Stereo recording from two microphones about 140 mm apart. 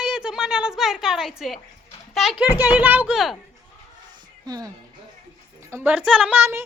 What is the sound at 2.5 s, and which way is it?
Speech, 15° right (ahead or behind).